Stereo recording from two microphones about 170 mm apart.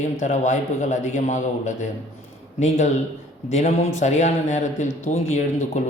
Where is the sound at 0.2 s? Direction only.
45° left (ahead or behind).